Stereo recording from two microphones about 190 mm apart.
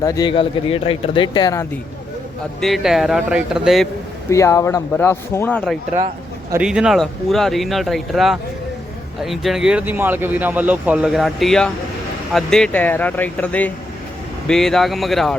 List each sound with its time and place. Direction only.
0.0 s speech: 20° left (ahead or behind)
2.6 s speech: centre (ahead or behind)
4.3 s speech: 15° left (ahead or behind)